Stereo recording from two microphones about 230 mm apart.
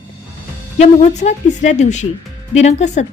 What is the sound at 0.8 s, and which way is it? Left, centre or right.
A woman's voice, left.